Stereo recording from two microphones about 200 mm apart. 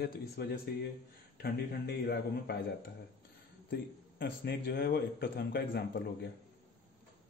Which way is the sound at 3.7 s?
55° left (ahead or behind).